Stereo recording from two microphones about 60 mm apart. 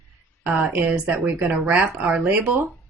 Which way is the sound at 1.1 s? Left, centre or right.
Right.